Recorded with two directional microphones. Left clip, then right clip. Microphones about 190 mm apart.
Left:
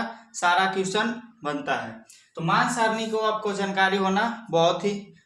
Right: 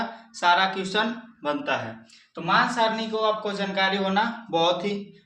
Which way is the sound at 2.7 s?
20° left (ahead or behind).